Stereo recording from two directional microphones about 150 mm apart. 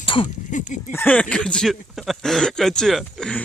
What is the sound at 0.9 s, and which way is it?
Speech, 10° left (ahead or behind).